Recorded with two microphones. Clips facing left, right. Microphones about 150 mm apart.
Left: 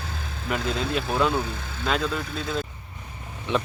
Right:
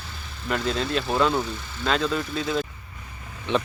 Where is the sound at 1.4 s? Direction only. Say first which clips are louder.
Even; 55° left (ahead or behind).